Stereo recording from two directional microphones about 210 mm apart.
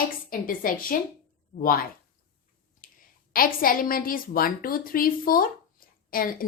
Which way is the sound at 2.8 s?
40° left (ahead or behind).